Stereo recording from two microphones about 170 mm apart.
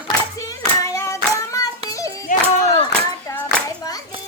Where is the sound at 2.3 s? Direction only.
50° left (ahead or behind).